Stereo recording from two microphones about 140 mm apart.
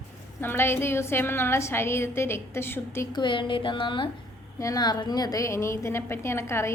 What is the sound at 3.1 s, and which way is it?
A woman's voice, 35° left (ahead or behind).